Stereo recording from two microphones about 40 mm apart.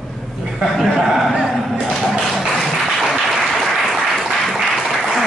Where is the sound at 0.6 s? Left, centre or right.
Centre.